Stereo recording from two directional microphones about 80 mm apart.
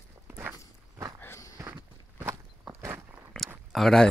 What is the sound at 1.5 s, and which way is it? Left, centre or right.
Walk, right.